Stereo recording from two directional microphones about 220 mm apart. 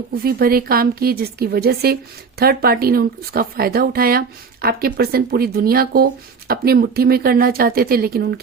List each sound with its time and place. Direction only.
0.1 s a woman's voice: 45° right (ahead or behind)